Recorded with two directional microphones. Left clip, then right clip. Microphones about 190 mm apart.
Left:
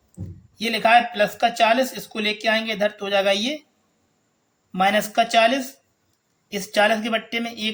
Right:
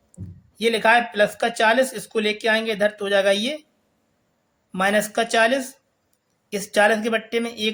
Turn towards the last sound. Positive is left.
turn(degrees=-25)  # may be behind; listen again after turning